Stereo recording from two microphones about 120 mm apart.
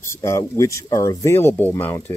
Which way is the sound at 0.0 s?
25° left (ahead or behind).